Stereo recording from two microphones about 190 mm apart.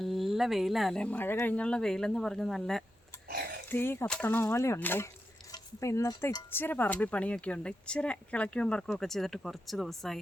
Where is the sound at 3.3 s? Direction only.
55° right (ahead or behind).